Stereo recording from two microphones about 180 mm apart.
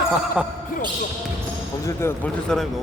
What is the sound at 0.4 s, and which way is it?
Speech, 5° right (ahead or behind).